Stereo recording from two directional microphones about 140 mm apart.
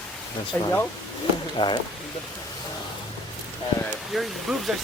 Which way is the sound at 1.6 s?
30° left (ahead or behind).